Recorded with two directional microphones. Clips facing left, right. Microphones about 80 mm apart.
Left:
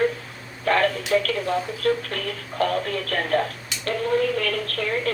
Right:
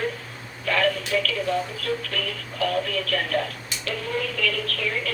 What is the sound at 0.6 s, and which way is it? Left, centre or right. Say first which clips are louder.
Speech: left 3 dB; left.